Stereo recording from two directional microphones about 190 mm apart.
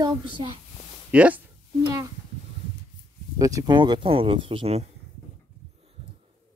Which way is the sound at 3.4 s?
20° right (ahead or behind).